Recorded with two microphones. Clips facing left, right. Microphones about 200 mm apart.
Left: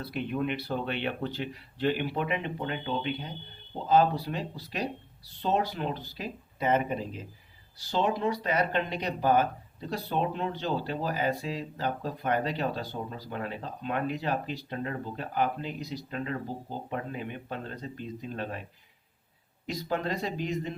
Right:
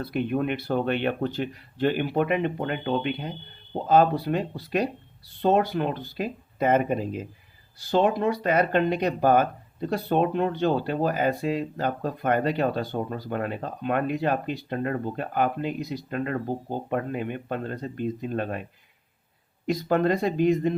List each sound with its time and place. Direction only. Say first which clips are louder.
0.0 s speech: right 5 dB; 55° right (ahead or behind)
19.6 s speech: right 9 dB; 55° right (ahead or behind)